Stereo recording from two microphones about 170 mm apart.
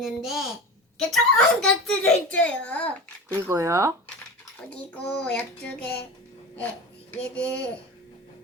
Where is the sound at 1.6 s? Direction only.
5° left (ahead or behind).